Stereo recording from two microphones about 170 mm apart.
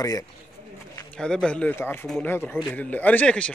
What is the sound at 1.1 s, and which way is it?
Speech, 5° left (ahead or behind).